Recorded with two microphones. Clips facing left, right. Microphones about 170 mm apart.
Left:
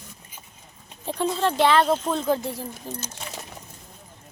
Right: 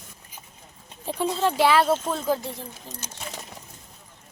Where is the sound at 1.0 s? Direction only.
5° right (ahead or behind).